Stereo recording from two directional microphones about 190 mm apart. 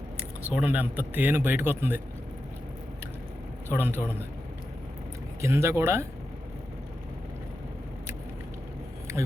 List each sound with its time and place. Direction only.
0.4 s speech: 10° right (ahead or behind)
3.7 s speech: 10° right (ahead or behind)
5.4 s speech: 15° right (ahead or behind)
9.1 s a sound: 15° right (ahead or behind)